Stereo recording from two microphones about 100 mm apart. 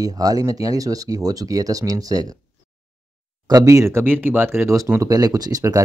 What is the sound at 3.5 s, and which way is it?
Speech, 35° right (ahead or behind).